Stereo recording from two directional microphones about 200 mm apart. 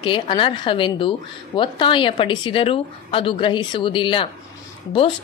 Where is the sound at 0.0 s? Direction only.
25° left (ahead or behind).